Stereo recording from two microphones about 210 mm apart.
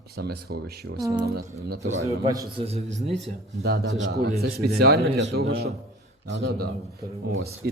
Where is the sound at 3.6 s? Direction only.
50° right (ahead or behind).